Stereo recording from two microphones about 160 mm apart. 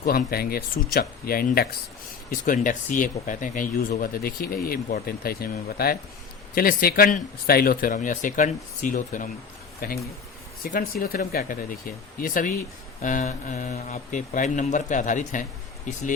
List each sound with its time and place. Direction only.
0.0 s speech: 65° left (ahead or behind)
2.3 s a man's voice: 55° left (ahead or behind)